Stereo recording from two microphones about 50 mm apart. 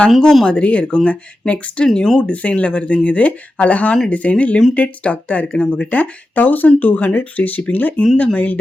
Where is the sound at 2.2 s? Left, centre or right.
Left.